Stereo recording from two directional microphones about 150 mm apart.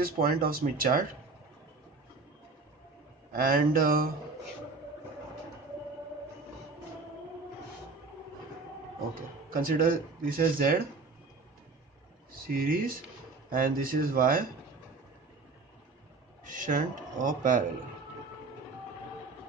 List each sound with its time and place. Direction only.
0.0 s speech: 80° right
3.3 s speech: 75° right (ahead or behind)
9.5 s speech: 70° right (ahead or behind)
12.5 s speech: 75° right (ahead or behind)
16.4 s speech: 60° right (ahead or behind)